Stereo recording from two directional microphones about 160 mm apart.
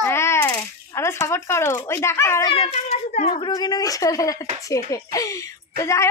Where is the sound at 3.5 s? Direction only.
25° left (ahead or behind).